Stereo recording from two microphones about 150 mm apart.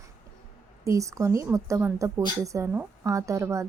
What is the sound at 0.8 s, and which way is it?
A woman's voice, 20° right (ahead or behind).